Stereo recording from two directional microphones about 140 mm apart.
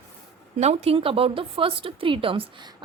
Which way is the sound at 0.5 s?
50° right (ahead or behind).